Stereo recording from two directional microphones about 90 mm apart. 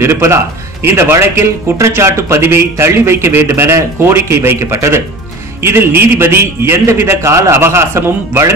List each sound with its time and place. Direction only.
0.0 s a man's voice: 30° right (ahead or behind)